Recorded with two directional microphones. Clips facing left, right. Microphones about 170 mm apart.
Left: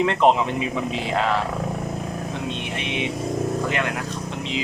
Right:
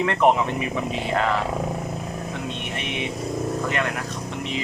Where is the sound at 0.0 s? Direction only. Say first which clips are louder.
Left 1 dB; 20° left (ahead or behind).